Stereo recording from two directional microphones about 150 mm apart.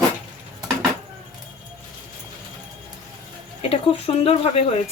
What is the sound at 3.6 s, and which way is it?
Speech, 40° left (ahead or behind).